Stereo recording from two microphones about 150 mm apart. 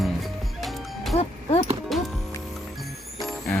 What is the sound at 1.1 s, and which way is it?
Livestock, 45° left (ahead or behind).